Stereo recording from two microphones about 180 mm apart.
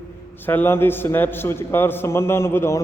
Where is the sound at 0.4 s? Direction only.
10° left (ahead or behind).